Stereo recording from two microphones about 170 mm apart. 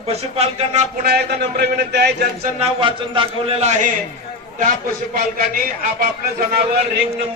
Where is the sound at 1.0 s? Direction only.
75° right (ahead or behind).